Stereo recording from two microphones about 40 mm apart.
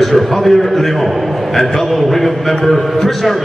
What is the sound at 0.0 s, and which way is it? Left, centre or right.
A man's voice, centre.